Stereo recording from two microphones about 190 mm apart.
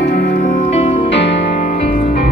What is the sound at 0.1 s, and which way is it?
Music, 45° left (ahead or behind).